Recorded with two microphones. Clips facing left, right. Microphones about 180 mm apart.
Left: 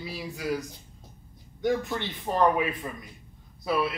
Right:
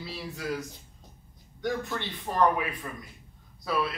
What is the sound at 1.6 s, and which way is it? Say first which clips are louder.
A man's voice: left 4 dB; 20° left (ahead or behind).